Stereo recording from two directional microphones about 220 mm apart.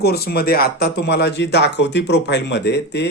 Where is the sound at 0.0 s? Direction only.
45° left (ahead or behind).